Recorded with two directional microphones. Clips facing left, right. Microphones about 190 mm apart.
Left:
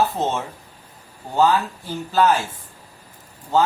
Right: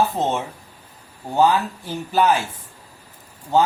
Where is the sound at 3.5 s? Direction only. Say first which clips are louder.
Right 1 dB; 15° right (ahead or behind).